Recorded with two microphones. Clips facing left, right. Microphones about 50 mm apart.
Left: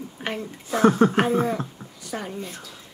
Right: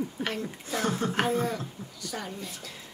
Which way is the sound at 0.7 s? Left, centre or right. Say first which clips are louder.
Left 11 dB; left.